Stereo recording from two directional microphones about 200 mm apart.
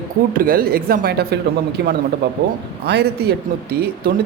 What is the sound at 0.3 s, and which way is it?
Speech, 45° right (ahead or behind).